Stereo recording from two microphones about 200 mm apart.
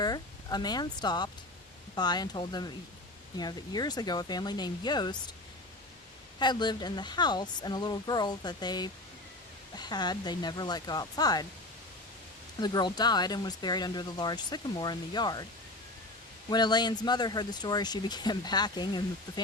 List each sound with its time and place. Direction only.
0.0 s speech: 20° left (ahead or behind)
6.4 s speech: 20° left (ahead or behind)
12.5 s speech: 20° left (ahead or behind)
16.5 s speech: 20° left (ahead or behind)